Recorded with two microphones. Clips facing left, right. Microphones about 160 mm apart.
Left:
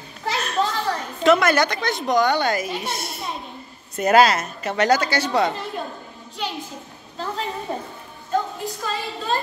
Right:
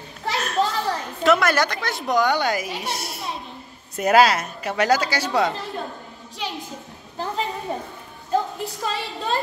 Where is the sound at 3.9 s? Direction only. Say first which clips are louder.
Left 1 dB; 5° right (ahead or behind).